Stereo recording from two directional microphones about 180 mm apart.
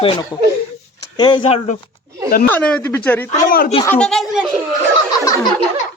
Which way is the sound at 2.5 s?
5° left (ahead or behind).